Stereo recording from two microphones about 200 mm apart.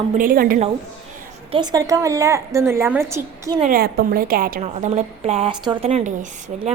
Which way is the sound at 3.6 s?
45° right (ahead or behind).